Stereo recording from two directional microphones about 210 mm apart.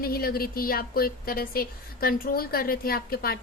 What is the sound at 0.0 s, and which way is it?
Speech, 45° left (ahead or behind).